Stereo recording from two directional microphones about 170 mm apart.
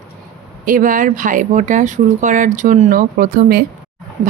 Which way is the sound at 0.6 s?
50° right (ahead or behind).